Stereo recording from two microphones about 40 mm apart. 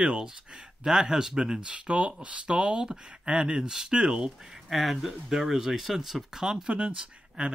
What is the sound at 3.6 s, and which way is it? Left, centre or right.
Speech, centre.